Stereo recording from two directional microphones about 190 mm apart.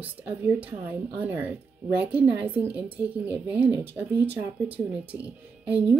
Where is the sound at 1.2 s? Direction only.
10° right (ahead or behind).